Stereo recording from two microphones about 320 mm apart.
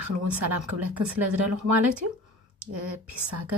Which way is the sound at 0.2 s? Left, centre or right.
Right.